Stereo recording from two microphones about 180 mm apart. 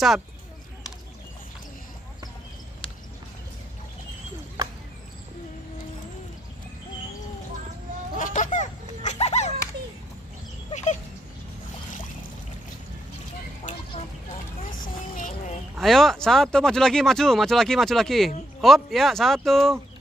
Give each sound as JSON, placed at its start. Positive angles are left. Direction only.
{"t": 8.2, "sound": "a sound", "side_deg": 45}
{"t": 10.7, "sound": "dog", "side_deg": 40}
{"t": 14.8, "sound": "music", "side_deg": 45}
{"t": 15.8, "sound": "speech", "side_deg": 0}